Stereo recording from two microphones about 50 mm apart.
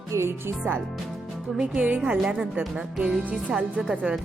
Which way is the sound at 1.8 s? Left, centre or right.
Right.